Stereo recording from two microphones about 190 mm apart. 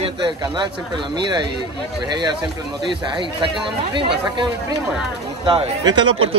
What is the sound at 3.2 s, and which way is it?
Speech, 25° right (ahead or behind).